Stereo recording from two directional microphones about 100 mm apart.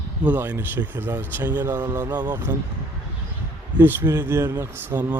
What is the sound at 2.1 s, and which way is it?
Speech, 45° right (ahead or behind).